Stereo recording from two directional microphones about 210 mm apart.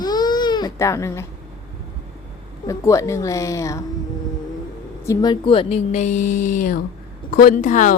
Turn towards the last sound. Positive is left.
turn(degrees=35)  # may be behind; listen again after turning